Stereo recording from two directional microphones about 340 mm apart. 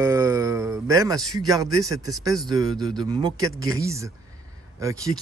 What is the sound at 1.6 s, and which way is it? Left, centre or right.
Speech, centre.